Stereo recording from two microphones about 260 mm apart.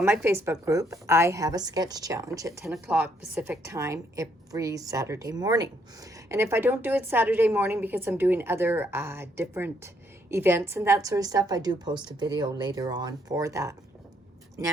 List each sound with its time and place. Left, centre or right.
0.0 s a woman's voice: centre